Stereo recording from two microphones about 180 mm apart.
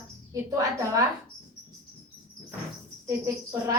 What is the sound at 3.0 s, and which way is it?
Speech, 15° right (ahead or behind).